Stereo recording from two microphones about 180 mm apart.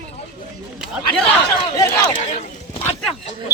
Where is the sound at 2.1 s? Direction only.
40° left (ahead or behind).